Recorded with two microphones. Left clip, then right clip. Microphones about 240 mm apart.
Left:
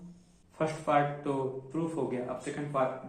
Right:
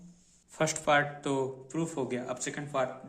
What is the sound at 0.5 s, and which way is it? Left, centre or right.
Speech, right.